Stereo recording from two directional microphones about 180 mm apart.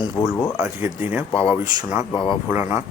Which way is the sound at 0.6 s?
10° right (ahead or behind).